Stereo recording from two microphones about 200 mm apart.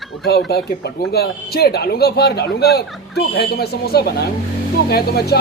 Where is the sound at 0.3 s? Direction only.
55° left (ahead or behind).